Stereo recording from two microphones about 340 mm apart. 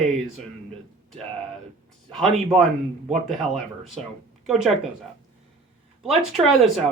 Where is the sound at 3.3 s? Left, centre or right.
Centre.